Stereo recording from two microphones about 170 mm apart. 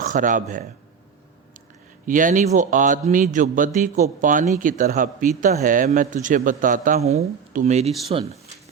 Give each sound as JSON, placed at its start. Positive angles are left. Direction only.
{"t": 0.0, "sound": "a man's voice", "side_deg": -50}
{"t": 2.0, "sound": "a man's voice", "side_deg": -50}